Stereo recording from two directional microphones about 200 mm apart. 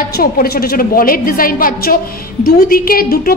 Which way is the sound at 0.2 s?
50° left (ahead or behind).